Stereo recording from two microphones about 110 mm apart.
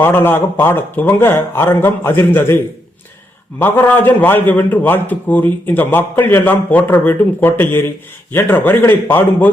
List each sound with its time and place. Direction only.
0.0 s speech: 20° left (ahead or behind)
3.6 s a man's voice: 20° left (ahead or behind)